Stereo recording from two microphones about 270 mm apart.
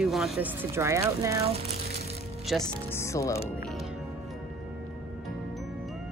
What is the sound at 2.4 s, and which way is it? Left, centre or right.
Speech, centre.